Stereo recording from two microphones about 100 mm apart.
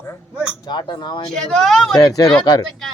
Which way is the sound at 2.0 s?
40° left (ahead or behind).